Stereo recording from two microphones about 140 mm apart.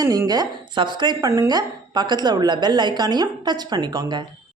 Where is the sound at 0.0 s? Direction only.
25° right (ahead or behind).